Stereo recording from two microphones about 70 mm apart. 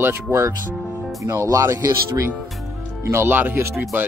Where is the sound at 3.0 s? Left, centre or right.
Right.